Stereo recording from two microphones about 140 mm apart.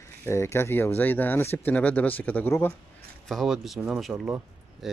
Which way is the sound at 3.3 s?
Centre (ahead or behind).